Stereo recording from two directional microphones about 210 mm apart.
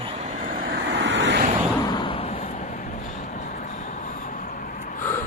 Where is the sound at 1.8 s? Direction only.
20° left (ahead or behind).